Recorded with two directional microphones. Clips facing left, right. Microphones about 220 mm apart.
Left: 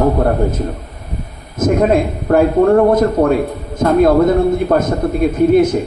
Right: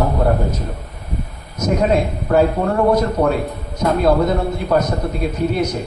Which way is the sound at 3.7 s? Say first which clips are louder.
Left 5 dB; 50° left (ahead or behind).